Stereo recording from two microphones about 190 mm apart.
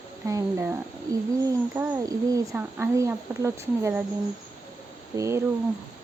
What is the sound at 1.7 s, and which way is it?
Speech, 15° right (ahead or behind).